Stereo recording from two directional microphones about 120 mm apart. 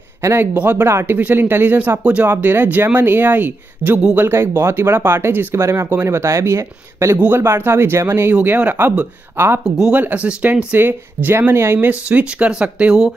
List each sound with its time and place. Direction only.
0.2 s speech: 20° right (ahead or behind)